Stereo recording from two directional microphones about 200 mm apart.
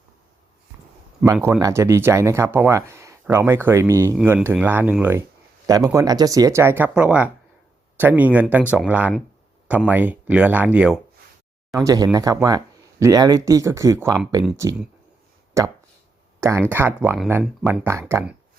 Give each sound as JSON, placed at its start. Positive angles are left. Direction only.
{"t": 1.2, "sound": "speech", "side_deg": -15}
{"t": 11.7, "sound": "speech", "side_deg": -15}